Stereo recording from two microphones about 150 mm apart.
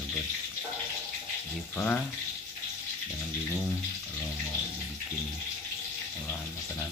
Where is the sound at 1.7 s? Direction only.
10° left (ahead or behind).